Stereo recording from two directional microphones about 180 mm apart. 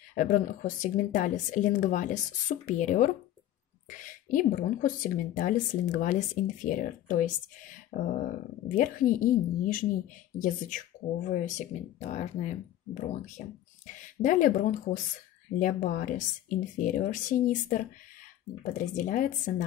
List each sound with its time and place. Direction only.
0.1 s speech: 45° left (ahead or behind)
7.9 s speech: 70° left (ahead or behind)
8.6 s speech: 45° left (ahead or behind)
11.2 s speech: 40° left (ahead or behind)